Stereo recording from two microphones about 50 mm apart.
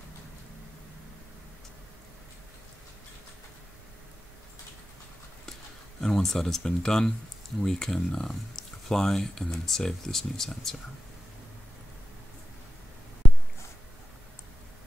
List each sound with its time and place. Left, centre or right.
5.9 s speech: centre